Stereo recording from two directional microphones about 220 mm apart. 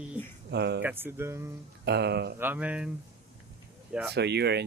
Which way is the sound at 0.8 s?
10° right (ahead or behind).